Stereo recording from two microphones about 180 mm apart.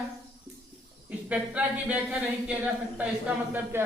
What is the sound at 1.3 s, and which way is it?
Speech, 5° right (ahead or behind).